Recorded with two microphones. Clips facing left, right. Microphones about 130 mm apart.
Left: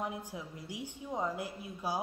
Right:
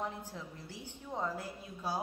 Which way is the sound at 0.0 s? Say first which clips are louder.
Left 2 dB; 15° left (ahead or behind).